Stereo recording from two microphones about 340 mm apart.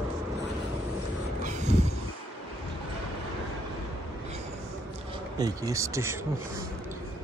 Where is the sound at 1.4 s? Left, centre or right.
Centre.